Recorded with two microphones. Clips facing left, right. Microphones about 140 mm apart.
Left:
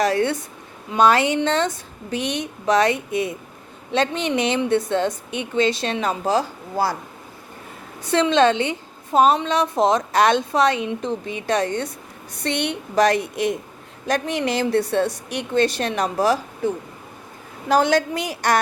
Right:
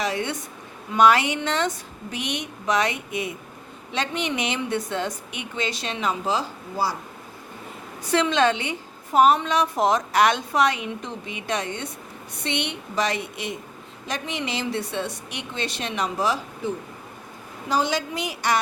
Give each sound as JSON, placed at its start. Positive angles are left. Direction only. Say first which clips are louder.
{"t": 0.0, "sound": "a woman's voice", "louder": "left 7 dB", "side_deg": 35}
{"t": 8.0, "sound": "a woman's voice", "louder": "left 4 dB", "side_deg": 25}
{"t": 17.7, "sound": "a woman's voice", "louder": "left 6 dB", "side_deg": 55}